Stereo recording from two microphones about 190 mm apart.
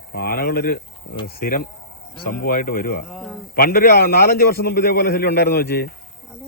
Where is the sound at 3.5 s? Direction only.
50° left (ahead or behind).